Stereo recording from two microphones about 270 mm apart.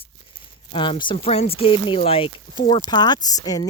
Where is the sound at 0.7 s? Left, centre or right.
Centre.